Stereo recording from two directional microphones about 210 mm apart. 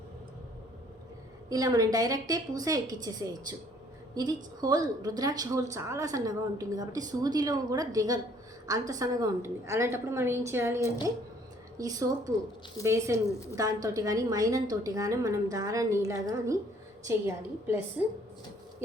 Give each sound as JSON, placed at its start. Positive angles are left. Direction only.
{"t": 1.5, "sound": "a woman's voice", "side_deg": -15}